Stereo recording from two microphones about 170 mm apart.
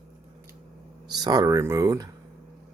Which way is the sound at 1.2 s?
20° right (ahead or behind).